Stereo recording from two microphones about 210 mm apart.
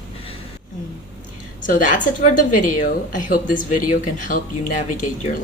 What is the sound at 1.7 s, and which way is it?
A woman's voice, 40° left (ahead or behind).